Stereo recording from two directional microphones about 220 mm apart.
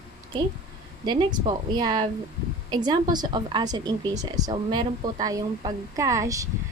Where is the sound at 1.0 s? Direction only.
20° right (ahead or behind).